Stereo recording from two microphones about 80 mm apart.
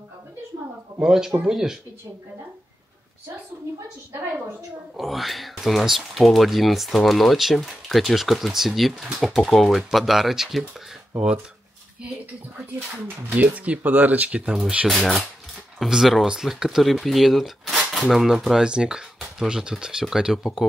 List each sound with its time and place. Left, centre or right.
1.0 s speech: centre
4.9 s speech: centre
13.4 s speech: centre
15.0 s speech: centre